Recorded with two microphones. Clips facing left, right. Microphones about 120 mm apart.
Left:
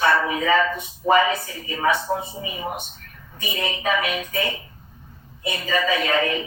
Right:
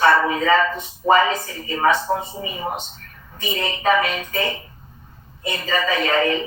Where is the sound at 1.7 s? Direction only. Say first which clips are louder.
Right 3 dB; 40° right (ahead or behind).